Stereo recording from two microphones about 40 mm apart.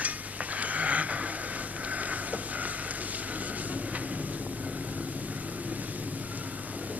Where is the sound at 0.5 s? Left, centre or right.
Right.